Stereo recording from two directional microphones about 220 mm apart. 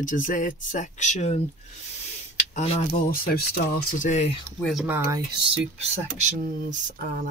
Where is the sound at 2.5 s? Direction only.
30° left (ahead or behind).